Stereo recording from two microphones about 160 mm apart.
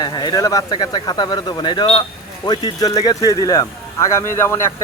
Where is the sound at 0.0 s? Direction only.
25° left (ahead or behind).